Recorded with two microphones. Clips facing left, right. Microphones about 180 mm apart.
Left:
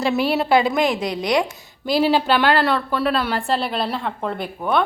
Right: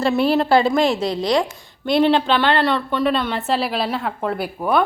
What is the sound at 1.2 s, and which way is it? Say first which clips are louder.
Speech: even; 20° left (ahead or behind).